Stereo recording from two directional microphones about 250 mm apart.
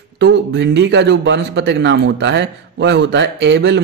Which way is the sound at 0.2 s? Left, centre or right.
Right.